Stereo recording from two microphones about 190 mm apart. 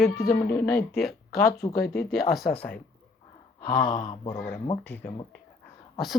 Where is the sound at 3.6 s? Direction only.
55° left (ahead or behind).